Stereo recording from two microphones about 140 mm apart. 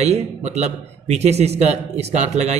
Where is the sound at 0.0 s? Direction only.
50° right (ahead or behind).